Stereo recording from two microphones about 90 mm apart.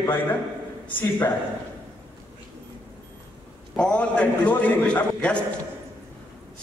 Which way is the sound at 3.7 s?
10° left (ahead or behind).